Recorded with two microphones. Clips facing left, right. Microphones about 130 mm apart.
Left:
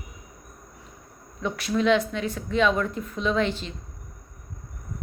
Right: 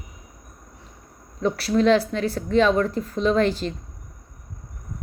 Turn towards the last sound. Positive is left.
turn(degrees=-40)  # may be behind; listen again after turning